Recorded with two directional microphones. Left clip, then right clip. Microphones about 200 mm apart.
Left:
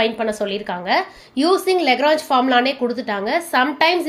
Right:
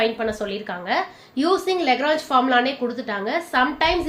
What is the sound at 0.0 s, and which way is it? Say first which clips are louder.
A woman's voice: left 3 dB; 40° left (ahead or behind).